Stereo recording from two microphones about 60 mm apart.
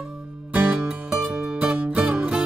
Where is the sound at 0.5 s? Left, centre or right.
Right.